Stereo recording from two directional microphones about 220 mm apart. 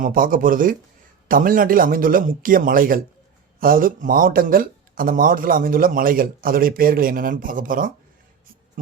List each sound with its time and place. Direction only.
0.0 s speech: 40° right (ahead or behind)